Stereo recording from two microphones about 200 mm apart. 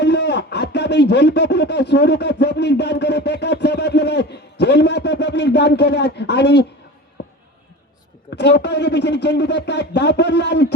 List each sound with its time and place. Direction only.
0.0 s speech: 55° left (ahead or behind)
8.4 s speech: 55° left (ahead or behind)